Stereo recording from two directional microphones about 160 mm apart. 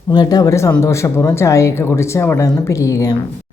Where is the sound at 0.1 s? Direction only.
25° left (ahead or behind).